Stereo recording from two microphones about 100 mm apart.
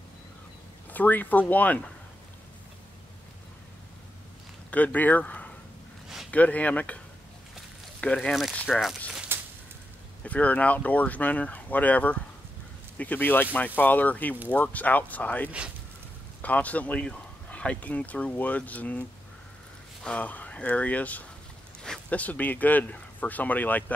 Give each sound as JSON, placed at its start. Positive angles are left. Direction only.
{"t": 0.9, "sound": "speech", "side_deg": 15}
{"t": 4.6, "sound": "speech", "side_deg": 15}
{"t": 8.0, "sound": "speech", "side_deg": 10}
{"t": 9.3, "sound": "a sound", "side_deg": -25}
{"t": 10.2, "sound": "speech", "side_deg": 15}